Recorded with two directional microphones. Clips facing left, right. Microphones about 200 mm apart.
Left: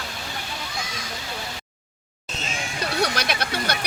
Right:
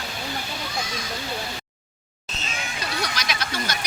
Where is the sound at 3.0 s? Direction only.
60° left (ahead or behind).